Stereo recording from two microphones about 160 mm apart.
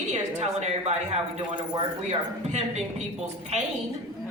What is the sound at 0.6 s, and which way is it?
Speech, 40° right (ahead or behind).